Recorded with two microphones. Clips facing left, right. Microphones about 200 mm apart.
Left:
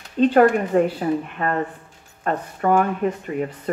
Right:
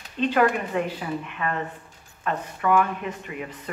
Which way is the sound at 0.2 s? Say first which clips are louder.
Left 7 dB; 45° left (ahead or behind).